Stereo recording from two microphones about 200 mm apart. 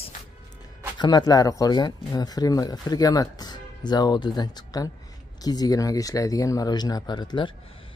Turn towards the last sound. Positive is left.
turn(degrees=25)  # may be behind; listen again after turning